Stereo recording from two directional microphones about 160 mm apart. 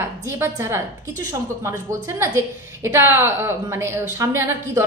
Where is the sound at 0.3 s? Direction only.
15° right (ahead or behind).